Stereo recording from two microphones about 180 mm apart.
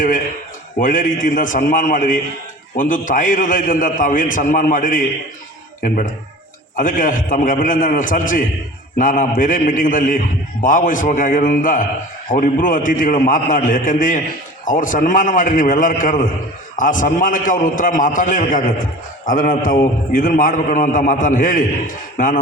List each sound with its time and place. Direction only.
0.8 s a man's voice: 45° left (ahead or behind)
6.7 s a man's voice: 45° left (ahead or behind)